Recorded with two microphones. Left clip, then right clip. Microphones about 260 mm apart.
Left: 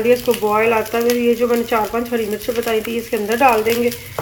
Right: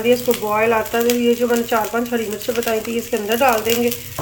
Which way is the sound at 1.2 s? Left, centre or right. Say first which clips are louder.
Left 1 dB; centre.